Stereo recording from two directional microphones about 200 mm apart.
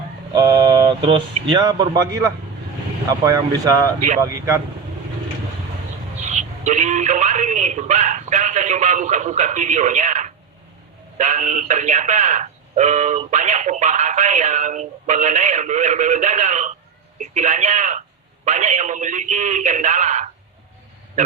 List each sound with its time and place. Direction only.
0.3 s speech: 20° right (ahead or behind)
6.1 s speech: 35° right (ahead or behind)